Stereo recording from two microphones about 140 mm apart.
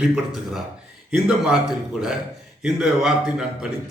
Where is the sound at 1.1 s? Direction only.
5° right (ahead or behind).